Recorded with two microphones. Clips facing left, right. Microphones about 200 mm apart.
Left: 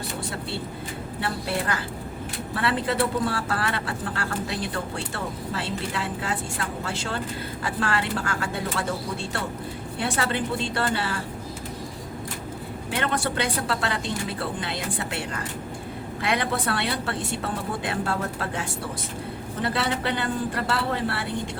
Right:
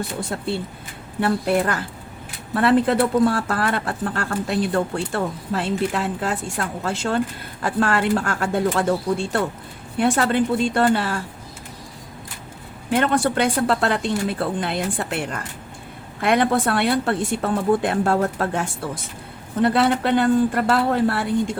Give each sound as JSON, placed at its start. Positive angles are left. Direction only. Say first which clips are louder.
{"t": 1.2, "sound": "speech", "louder": "right 9 dB", "side_deg": -50}
{"t": 10.0, "sound": "speech", "louder": "right 8 dB", "side_deg": -50}
{"t": 12.9, "sound": "speech", "louder": "right 8 dB", "side_deg": -50}